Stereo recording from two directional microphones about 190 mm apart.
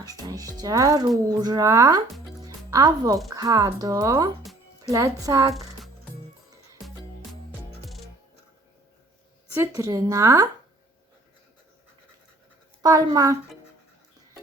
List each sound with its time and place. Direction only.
0.0 s speech: 20° right (ahead or behind)
9.6 s speech: 15° right (ahead or behind)
12.8 s speech: 20° right (ahead or behind)